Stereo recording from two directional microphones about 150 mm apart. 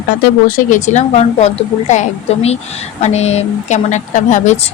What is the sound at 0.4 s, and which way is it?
A woman's voice, 65° left (ahead or behind).